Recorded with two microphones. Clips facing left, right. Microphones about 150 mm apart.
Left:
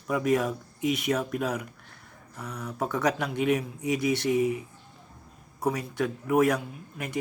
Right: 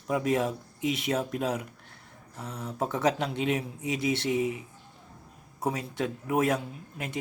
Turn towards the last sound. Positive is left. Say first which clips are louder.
# left 2 dB
turn(degrees=-25)  # may be behind; listen again after turning